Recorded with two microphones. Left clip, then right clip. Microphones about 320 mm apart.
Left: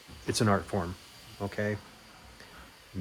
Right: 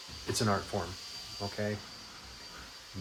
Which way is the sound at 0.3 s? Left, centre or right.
Left.